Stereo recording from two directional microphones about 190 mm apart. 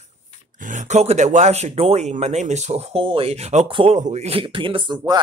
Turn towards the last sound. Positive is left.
turn(degrees=-20)  # may be behind; listen again after turning